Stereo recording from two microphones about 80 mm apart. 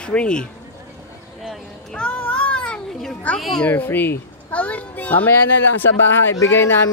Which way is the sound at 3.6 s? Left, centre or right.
Left.